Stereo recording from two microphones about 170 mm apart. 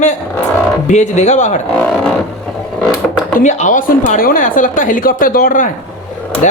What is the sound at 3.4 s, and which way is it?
A woman's voice, 45° left (ahead or behind).